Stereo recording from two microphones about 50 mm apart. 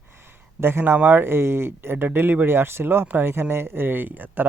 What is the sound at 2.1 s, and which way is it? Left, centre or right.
Speech, right.